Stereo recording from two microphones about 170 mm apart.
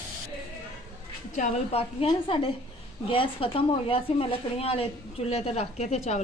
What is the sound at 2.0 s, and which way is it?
Speech, 30° left (ahead or behind).